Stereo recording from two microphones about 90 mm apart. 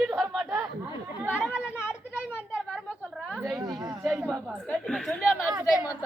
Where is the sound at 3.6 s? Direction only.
50° right (ahead or behind).